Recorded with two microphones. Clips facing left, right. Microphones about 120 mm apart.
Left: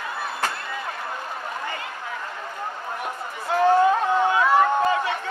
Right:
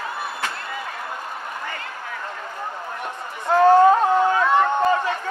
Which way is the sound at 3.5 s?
40° right (ahead or behind).